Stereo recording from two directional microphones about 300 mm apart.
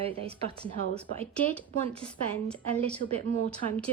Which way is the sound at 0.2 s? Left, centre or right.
Centre.